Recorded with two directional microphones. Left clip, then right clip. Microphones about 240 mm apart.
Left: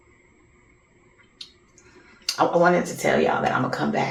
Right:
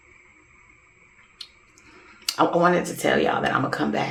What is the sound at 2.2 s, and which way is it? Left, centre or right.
Speech, right.